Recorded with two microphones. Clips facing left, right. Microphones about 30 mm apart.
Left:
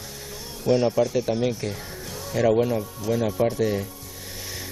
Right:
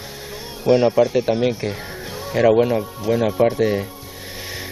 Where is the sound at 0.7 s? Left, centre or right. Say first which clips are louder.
Right 6 dB; right.